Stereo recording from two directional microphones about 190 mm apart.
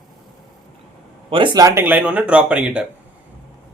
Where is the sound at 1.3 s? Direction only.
25° right (ahead or behind); by 2.8 s 5° right (ahead or behind).